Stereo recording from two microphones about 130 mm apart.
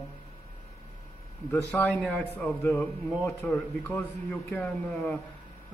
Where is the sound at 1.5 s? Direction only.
15° left (ahead or behind).